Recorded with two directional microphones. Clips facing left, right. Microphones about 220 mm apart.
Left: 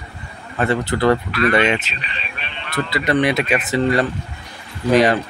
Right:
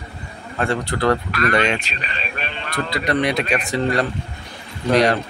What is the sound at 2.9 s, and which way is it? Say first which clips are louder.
Speech: left 3 dB; centre (ahead or behind).